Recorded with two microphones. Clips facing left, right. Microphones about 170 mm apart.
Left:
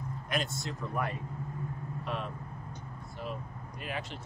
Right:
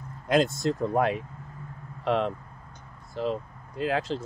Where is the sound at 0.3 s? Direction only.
90° right.